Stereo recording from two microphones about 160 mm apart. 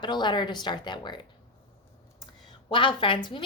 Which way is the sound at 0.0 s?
30° left (ahead or behind).